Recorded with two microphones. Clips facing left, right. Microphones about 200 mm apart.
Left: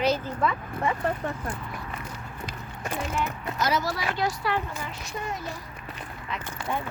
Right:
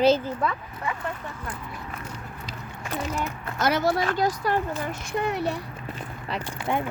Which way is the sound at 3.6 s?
60° right (ahead or behind).